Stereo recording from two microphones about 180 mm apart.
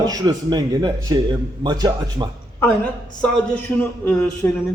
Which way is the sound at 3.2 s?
5° left (ahead or behind).